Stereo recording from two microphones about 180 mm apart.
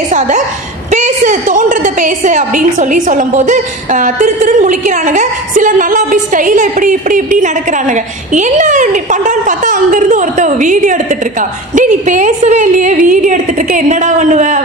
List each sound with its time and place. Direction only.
0.9 s a woman's voice: 45° right (ahead or behind)